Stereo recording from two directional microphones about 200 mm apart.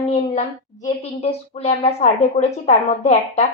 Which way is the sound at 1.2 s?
30° left (ahead or behind).